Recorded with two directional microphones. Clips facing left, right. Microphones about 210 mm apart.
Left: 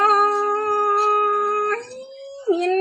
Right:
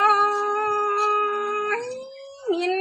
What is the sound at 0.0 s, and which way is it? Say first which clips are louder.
Humming: left 4 dB; 50° left (ahead or behind).